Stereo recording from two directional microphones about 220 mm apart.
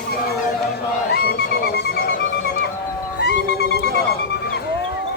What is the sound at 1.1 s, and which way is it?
Music, 45° left (ahead or behind).